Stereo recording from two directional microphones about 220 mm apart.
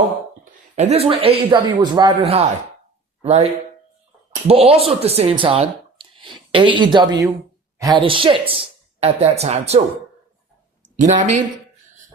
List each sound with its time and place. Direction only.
0.8 s a man's voice: 30° right (ahead or behind)
10.8 s speech: 35° right (ahead or behind)